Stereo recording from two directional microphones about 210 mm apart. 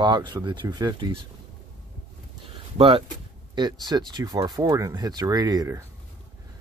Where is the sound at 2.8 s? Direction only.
25° right (ahead or behind).